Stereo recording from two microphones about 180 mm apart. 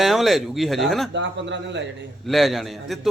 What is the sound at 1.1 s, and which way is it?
Speech, 80° right.